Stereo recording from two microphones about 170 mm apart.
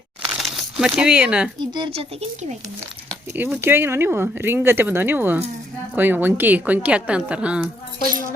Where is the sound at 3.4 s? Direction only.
10° right (ahead or behind).